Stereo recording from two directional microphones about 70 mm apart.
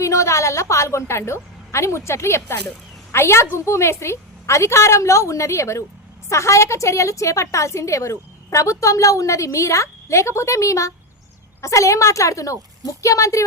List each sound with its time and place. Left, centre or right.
0.0 s a woman's voice: left